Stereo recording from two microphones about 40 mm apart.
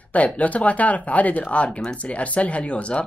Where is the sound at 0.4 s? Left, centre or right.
Left.